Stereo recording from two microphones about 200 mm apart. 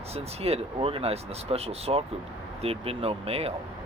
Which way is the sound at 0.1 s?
30° right (ahead or behind).